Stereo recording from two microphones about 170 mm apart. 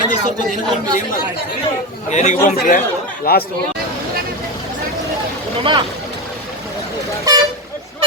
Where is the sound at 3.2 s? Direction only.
65° left (ahead or behind).